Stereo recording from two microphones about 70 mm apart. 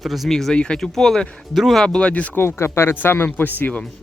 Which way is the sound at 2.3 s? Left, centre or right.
Left.